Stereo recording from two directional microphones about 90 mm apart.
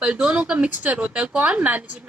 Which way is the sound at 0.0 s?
10° right (ahead or behind).